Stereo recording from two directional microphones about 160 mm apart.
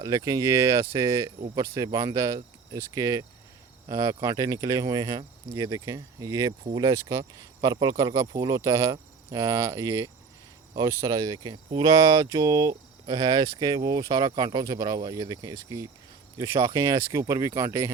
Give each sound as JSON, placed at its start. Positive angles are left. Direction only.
{"t": 0.0, "sound": "speech", "side_deg": -20}